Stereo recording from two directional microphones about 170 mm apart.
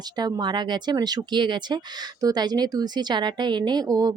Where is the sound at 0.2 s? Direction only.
25° right (ahead or behind).